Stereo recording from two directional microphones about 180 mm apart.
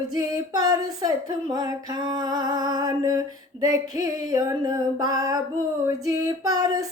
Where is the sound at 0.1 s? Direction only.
20° right (ahead or behind).